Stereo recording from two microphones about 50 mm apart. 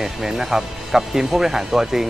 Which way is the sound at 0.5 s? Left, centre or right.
Centre.